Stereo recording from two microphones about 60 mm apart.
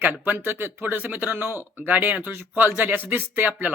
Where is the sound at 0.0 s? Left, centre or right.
Right.